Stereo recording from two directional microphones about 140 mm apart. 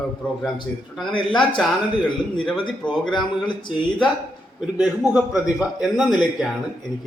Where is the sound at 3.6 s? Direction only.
35° left (ahead or behind).